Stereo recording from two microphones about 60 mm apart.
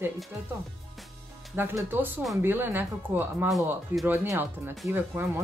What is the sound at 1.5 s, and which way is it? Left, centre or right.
Speech, right.